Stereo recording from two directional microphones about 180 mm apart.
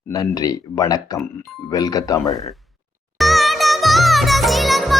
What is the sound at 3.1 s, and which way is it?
Music, centre (ahead or behind).